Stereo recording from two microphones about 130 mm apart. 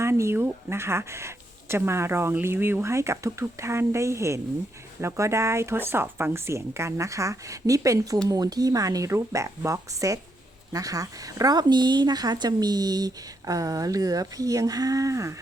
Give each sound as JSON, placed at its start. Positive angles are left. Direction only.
{"t": 0.0, "sound": "a woman's voice", "side_deg": -20}